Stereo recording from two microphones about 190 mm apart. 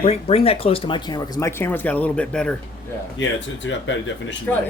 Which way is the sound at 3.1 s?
75° left (ahead or behind).